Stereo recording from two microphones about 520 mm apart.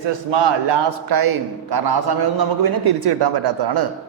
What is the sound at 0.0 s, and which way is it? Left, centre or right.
A man's voice, right.